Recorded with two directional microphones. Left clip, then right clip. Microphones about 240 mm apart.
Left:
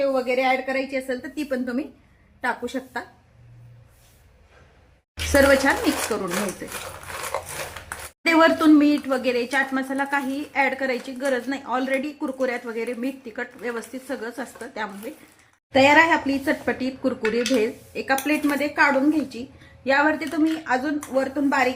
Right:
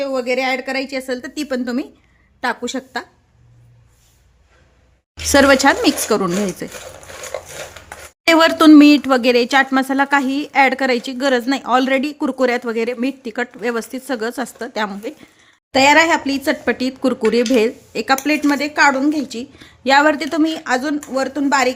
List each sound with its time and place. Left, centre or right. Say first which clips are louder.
0.0 s speech: right 2 dB; right
5.3 s speech: right 6 dB; right
8.3 s speech: right 6 dB; right